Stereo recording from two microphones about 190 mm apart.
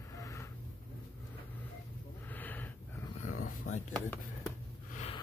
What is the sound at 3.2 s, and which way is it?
Dog, 45° left (ahead or behind).